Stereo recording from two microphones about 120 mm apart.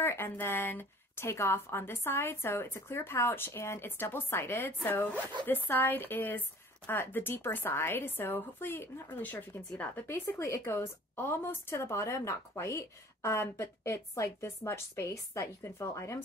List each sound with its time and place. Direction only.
0.0 s speech: 20° left (ahead or behind)